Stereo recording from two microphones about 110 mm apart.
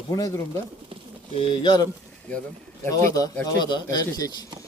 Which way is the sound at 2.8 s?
30° left (ahead or behind).